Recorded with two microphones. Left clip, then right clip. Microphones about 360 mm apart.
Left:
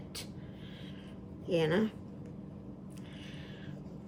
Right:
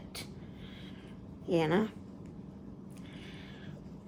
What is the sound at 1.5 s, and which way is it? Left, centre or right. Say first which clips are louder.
Speech: right 1 dB; centre.